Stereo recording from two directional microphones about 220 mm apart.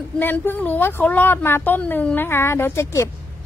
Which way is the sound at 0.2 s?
10° left (ahead or behind).